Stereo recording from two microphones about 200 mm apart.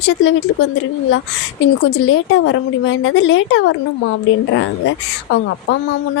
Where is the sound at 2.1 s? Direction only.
75° left (ahead or behind).